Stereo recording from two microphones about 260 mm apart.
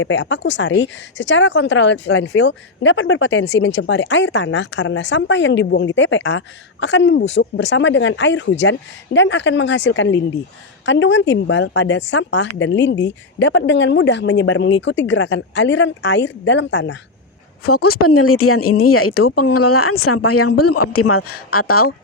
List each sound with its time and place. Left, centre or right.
0.0 s speech: left
18.0 s speech: left